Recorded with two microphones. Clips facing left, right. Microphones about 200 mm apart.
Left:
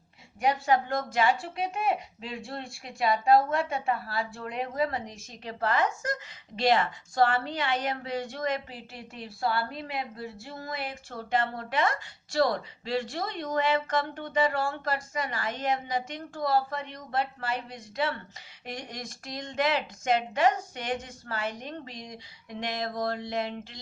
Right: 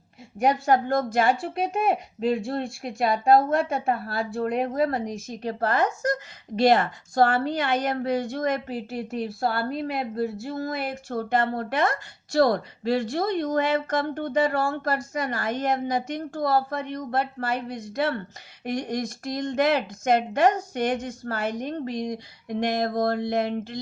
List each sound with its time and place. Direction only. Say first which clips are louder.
0.3 s a woman's voice: right 4 dB; 45° right (ahead or behind)